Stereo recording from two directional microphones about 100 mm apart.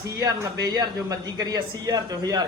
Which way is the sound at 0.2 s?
35° right (ahead or behind).